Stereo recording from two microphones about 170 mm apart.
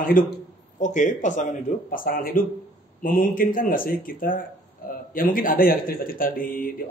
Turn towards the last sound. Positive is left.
turn(degrees=55)  # may be behind; listen again after turning